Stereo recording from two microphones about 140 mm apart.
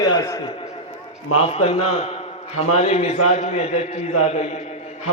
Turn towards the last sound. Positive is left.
turn(degrees=50)  # may be behind; listen again after turning